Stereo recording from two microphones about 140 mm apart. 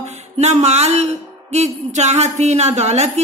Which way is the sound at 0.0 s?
55° right (ahead or behind).